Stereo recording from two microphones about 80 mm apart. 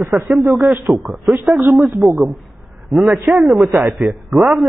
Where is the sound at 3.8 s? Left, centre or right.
Centre.